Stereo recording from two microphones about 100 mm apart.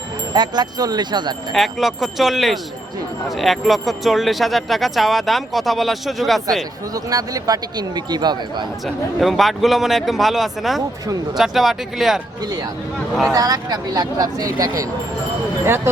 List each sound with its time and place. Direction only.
0.3 s speech: 45° right (ahead or behind)
1.5 s speech: centre (ahead or behind)
6.9 s speech: 40° right (ahead or behind)
9.2 s speech: centre (ahead or behind)
13.3 s speech: 40° right (ahead or behind)
15.6 s speech: 25° right (ahead or behind)